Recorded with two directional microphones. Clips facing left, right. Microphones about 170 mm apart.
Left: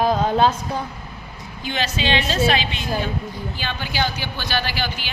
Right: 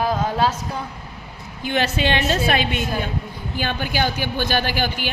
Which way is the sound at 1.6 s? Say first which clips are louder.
Right 3 dB; 55° right (ahead or behind).